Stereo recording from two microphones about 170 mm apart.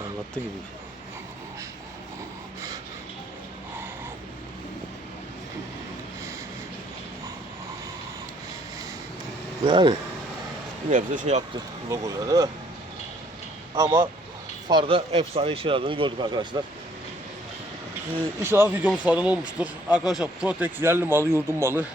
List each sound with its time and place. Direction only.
9.6 s speech: 25° right (ahead or behind)
10.9 s speech: 50° right (ahead or behind)
11.9 s speech: 20° right (ahead or behind)
13.7 s speech: 15° right (ahead or behind)
14.7 s speech: 30° right (ahead or behind)
18.4 s speech: 15° right (ahead or behind)